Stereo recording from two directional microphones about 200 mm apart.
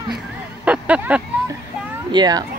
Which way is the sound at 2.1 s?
20° right (ahead or behind).